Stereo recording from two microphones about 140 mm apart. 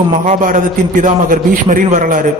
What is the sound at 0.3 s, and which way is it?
A man's voice, 65° right (ahead or behind).